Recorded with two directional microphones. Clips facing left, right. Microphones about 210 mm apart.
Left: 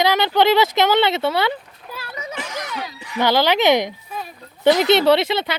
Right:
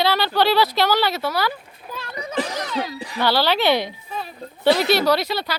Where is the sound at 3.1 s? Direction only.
20° left (ahead or behind).